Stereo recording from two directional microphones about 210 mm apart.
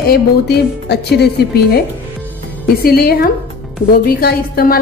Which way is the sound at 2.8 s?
45° left (ahead or behind).